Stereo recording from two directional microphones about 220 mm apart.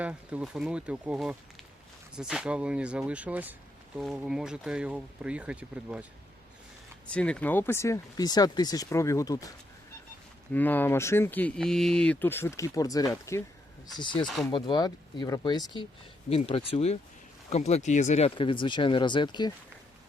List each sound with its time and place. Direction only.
0.0 s speech: 5° right (ahead or behind)
7.1 s speech: 5° left (ahead or behind)
10.5 s speech: 10° left (ahead or behind)
14.3 s speech: centre (ahead or behind)
14.5 s speech: 20° left (ahead or behind)